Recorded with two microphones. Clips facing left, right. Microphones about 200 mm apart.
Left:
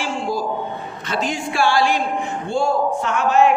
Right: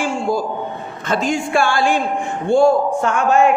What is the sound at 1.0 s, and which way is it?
Speech, 50° right (ahead or behind).